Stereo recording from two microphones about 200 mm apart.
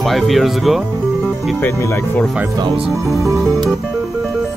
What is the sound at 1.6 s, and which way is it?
Speech, 15° left (ahead or behind).